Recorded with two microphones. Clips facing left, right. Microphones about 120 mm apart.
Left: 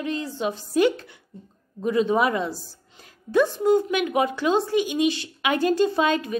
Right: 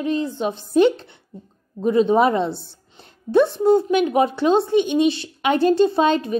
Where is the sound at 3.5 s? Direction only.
25° right (ahead or behind).